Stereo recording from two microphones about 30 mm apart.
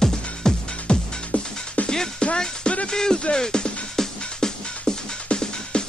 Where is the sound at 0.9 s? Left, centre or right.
Left.